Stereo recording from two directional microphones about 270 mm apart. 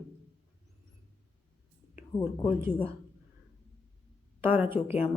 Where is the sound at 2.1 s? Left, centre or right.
Centre.